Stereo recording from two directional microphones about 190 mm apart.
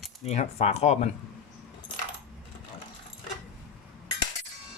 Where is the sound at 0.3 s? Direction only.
35° left (ahead or behind).